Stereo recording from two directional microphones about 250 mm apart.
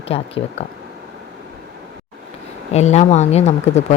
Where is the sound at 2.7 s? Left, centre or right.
Left.